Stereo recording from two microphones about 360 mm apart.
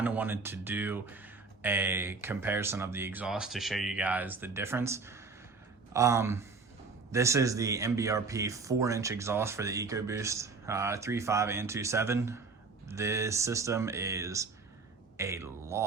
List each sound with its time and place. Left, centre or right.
0.0 s speech: centre